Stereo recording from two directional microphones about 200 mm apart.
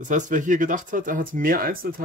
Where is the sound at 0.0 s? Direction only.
40° right (ahead or behind).